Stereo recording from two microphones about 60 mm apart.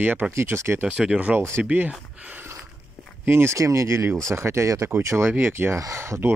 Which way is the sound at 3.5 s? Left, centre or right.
Right.